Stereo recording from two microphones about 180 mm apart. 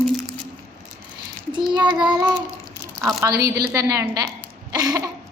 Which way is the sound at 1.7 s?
25° right (ahead or behind).